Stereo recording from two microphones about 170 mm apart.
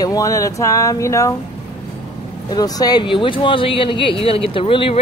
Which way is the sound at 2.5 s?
20° left (ahead or behind).